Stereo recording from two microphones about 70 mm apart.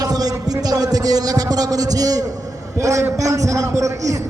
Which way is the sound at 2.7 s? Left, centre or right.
Right.